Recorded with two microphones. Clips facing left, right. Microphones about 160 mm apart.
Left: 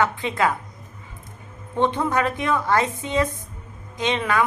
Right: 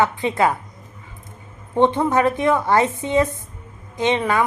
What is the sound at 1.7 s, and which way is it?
A woman's voice, 20° right (ahead or behind).